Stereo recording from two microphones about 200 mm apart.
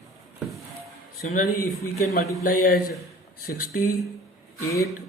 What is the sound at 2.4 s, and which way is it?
Speech, 45° left (ahead or behind).